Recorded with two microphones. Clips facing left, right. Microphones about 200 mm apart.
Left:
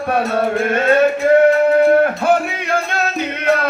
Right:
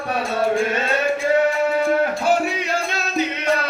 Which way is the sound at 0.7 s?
55° left (ahead or behind).